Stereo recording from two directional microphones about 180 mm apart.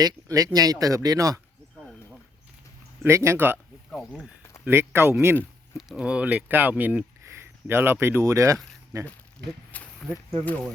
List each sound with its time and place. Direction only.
0.0 s speech: 20° right (ahead or behind)
1.7 s a sound: centre (ahead or behind)
3.0 s speech: 15° right (ahead or behind)
3.9 s speech: 5° left (ahead or behind)
4.6 s speech: 10° right (ahead or behind)
5.7 s speech: centre (ahead or behind)
9.7 s speech: 5° left (ahead or behind)